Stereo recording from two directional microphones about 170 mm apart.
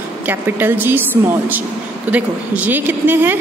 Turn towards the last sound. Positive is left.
turn(degrees=-10)  # may be behind; listen again after turning